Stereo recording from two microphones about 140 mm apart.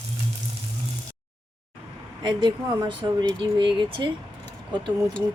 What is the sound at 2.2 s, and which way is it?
Speech, 30° right (ahead or behind).